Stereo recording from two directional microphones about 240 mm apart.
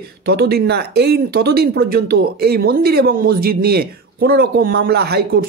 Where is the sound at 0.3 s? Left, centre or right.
Right.